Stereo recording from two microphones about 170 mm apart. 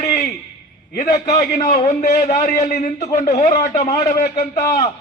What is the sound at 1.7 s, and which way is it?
A man's voice, 40° left (ahead or behind).